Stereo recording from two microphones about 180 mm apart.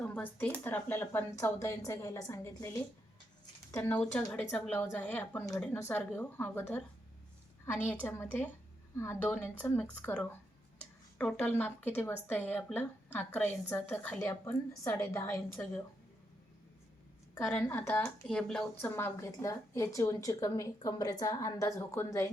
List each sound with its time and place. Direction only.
0.0 s a woman's voice: 10° left (ahead or behind)
3.4 s a sound: 20° left (ahead or behind)
3.8 s a woman's voice: 5° left (ahead or behind)
7.9 s a woman's voice: 10° left (ahead or behind)
17.6 s a woman's voice: 10° left (ahead or behind)